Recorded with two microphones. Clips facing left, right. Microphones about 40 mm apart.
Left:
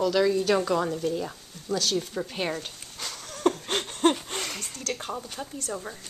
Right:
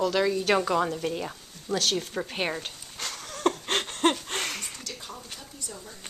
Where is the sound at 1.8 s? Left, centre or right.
Right.